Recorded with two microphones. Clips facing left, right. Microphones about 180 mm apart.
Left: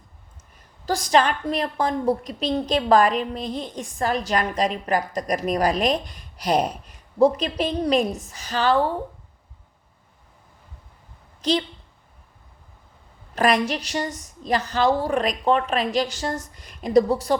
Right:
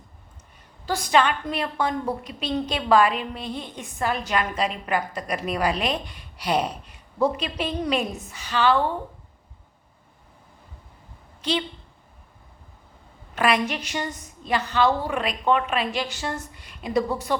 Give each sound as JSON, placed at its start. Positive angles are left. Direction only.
{"t": 0.9, "sound": "a woman's voice", "side_deg": 40}
{"t": 13.3, "sound": "a woman's voice", "side_deg": 40}